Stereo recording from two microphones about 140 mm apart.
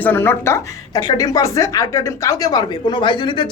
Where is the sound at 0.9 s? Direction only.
30° left (ahead or behind).